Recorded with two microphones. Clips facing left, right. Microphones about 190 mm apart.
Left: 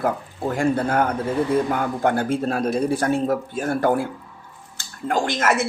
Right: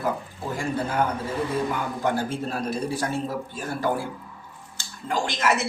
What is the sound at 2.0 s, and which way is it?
Speech, 55° left (ahead or behind).